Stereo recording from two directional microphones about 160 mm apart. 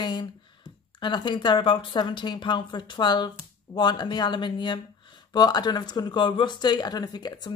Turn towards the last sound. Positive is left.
turn(degrees=25)  # may be behind; listen again after turning